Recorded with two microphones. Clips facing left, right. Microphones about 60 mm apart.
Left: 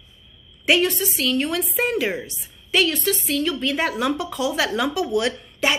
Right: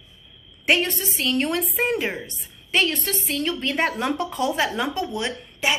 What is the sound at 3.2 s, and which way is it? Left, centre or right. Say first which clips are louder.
A woman's voice: left 3 dB; right.